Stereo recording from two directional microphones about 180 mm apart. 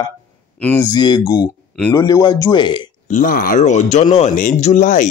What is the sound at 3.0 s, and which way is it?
Speech, 45° left (ahead or behind).